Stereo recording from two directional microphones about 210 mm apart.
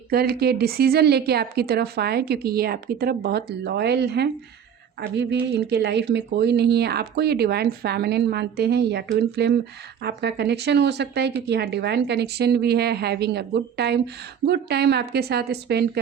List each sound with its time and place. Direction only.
0.1 s speech: 50° right (ahead or behind)